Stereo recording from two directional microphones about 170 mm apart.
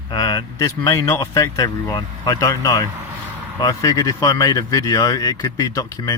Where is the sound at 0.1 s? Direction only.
20° left (ahead or behind).